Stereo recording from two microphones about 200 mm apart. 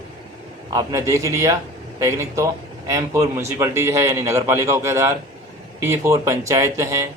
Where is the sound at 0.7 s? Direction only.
15° right (ahead or behind).